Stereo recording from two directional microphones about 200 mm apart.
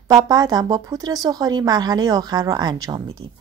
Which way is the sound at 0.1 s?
20° right (ahead or behind).